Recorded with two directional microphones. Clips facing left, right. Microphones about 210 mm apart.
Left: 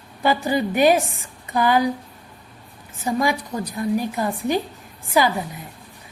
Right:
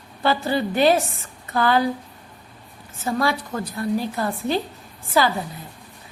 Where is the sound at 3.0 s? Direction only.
15° left (ahead or behind).